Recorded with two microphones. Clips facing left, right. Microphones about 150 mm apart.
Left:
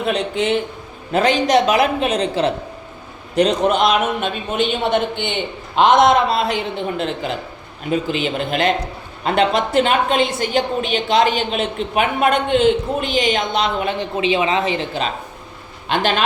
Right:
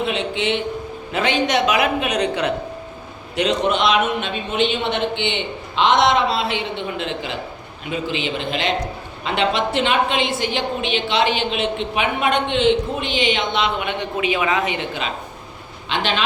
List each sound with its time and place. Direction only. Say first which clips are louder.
0.0 s a sound: left 2 dB; 45° left (ahead or behind)
1.1 s a woman's voice: left 5 dB; 40° left (ahead or behind)
15.9 s a woman's voice: left 4 dB; 45° left (ahead or behind)